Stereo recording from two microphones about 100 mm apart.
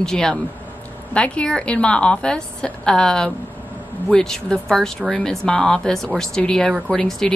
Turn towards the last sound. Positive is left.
turn(degrees=10)  # may be behind; listen again after turning